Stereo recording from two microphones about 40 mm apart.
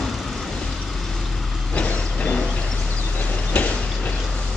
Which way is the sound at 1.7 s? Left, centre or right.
Left.